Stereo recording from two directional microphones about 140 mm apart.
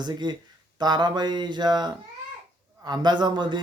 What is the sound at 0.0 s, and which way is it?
Speech, 30° right (ahead or behind).